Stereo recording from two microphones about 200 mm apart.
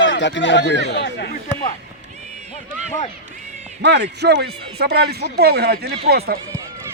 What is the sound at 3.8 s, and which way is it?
Speech, 60° right (ahead or behind).